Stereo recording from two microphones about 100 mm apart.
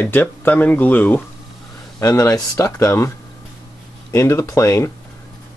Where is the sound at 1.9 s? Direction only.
30° left (ahead or behind).